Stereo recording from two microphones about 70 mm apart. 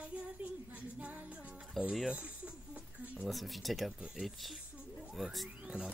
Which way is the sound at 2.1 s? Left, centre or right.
Centre.